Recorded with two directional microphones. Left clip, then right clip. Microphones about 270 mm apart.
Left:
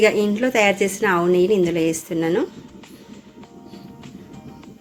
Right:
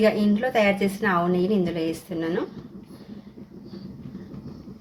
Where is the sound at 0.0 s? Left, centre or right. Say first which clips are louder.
Left 4 dB; left.